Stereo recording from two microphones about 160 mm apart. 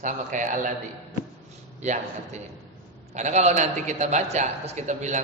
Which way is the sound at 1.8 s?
45° right (ahead or behind).